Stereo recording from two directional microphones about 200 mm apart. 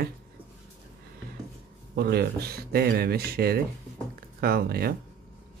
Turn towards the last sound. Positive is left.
turn(degrees=-50)  # may be behind; listen again after turning